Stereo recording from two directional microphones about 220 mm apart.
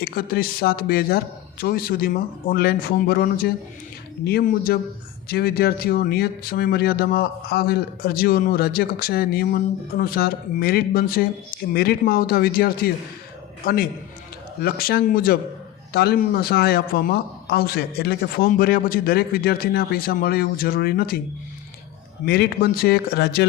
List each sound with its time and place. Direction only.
0.0 s speech: 45° left (ahead or behind)
22.3 s speech: 45° left (ahead or behind)